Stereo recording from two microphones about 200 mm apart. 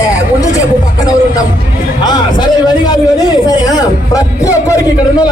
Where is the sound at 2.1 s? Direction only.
20° left (ahead or behind).